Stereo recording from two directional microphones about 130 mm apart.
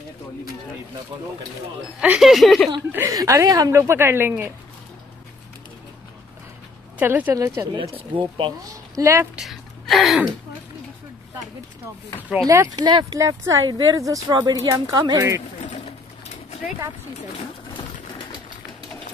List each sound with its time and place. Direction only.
2.0 s speech: 5° right (ahead or behind)
3.1 s speech: 25° right (ahead or behind)
7.0 s speech: 15° right (ahead or behind)
7.9 s speech: 40° right (ahead or behind)
8.9 s speech: 20° right (ahead or behind)
9.3 s speech: centre (ahead or behind)
12.3 s speech: 5° right (ahead or behind)
12.7 s speech: 35° right (ahead or behind)
15.6 s pigeon: 60° left (ahead or behind)